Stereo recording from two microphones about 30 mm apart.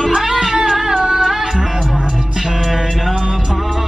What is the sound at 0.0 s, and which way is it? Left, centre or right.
Music, centre.